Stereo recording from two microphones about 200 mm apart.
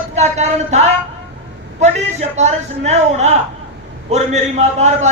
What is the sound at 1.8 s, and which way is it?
A man's voice, 35° right (ahead or behind).